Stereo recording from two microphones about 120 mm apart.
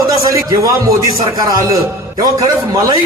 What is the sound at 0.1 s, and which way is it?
A man's voice, 25° right (ahead or behind).